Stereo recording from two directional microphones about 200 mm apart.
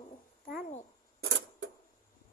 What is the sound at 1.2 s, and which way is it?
Camera, 80° right.